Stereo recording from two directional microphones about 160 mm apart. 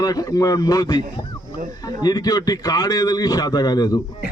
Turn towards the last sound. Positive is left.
turn(degrees=25)  # may be behind; listen again after turning